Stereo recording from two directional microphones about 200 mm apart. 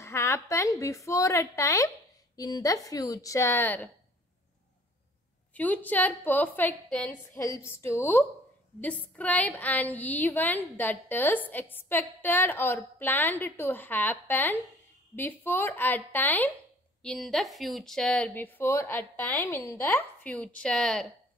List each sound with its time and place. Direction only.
0.0 s a woman's voice: 15° left (ahead or behind)
5.5 s a woman's voice: 10° left (ahead or behind)